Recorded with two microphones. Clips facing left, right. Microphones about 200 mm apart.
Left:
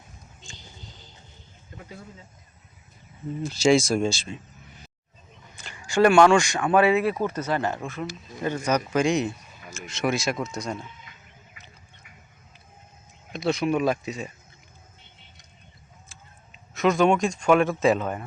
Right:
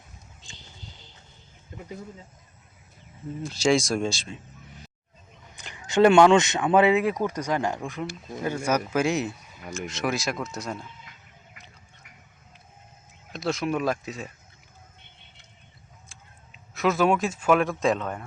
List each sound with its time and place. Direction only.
3.4 s speech: centre (ahead or behind)
5.5 s speech: 20° right (ahead or behind); by 10.8 s centre (ahead or behind)
13.3 s speech: centre (ahead or behind)
16.0 s speech: centre (ahead or behind)